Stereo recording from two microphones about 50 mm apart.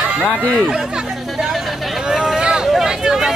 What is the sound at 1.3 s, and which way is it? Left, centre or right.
Chatter, centre.